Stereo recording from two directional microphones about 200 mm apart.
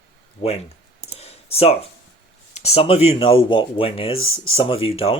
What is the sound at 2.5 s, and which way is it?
Speech, 30° left (ahead or behind).